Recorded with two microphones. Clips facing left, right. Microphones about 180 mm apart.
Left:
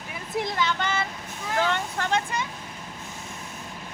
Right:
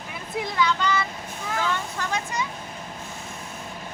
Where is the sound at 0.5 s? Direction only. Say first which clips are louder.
Right 7 dB; 50° left (ahead or behind).